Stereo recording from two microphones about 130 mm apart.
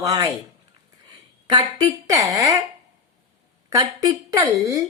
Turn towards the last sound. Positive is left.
turn(degrees=-25)  # may be behind; listen again after turning